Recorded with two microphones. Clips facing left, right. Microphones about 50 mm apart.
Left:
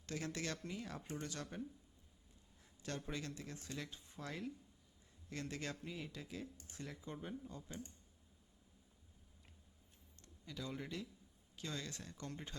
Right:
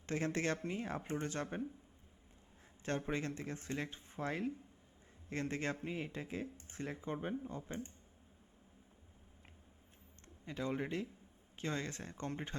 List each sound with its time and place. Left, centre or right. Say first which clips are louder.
0.0 s speech: right 7 dB; right
2.8 s speech: right 7 dB; right
10.2 s a man's voice: right 8 dB; right